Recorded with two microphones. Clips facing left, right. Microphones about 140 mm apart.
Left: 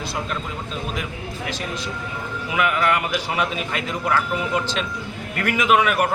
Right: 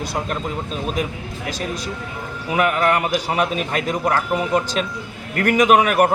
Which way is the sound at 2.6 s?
40° right (ahead or behind).